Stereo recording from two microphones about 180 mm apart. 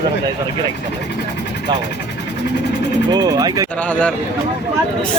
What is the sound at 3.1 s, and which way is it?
Speech, 20° right (ahead or behind).